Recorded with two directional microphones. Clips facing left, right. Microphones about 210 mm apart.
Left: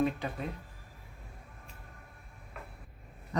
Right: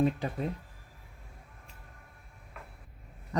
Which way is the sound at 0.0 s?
35° right (ahead or behind).